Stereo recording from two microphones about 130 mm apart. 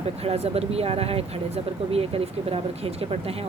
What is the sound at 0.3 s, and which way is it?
Speech, 50° right (ahead or behind).